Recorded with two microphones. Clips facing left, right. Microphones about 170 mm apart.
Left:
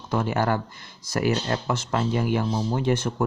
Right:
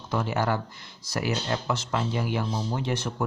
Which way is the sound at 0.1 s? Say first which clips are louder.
Left 3 dB; 50° left (ahead or behind).